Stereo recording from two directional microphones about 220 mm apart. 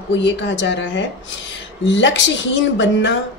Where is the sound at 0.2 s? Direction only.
55° left (ahead or behind).